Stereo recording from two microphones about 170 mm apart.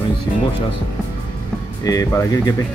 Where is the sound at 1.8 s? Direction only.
20° left (ahead or behind).